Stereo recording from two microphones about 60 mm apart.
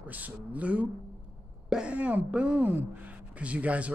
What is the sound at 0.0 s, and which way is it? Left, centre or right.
Speech, right.